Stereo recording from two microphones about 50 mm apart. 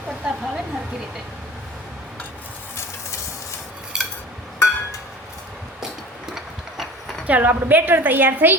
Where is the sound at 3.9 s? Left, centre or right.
Centre.